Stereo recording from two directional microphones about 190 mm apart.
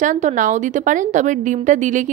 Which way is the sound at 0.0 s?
40° right (ahead or behind).